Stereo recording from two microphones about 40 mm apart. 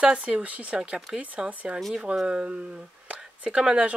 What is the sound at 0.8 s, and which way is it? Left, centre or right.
Speech, right.